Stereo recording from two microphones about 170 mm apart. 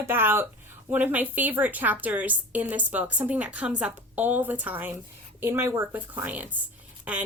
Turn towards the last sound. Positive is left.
turn(degrees=-10)  # may be behind; listen again after turning